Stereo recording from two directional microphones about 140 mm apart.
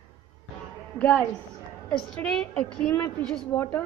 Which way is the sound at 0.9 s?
10° left (ahead or behind).